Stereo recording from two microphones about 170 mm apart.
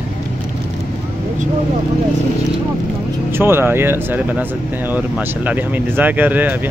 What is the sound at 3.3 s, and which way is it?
Speech, 15° right (ahead or behind).